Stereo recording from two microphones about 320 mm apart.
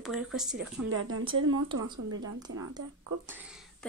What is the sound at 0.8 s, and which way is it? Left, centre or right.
Speech, right.